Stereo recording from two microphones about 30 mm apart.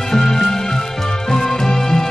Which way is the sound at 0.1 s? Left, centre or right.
Centre.